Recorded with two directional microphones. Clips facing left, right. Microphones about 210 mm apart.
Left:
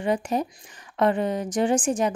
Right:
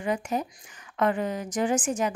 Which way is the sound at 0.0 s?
35° left (ahead or behind).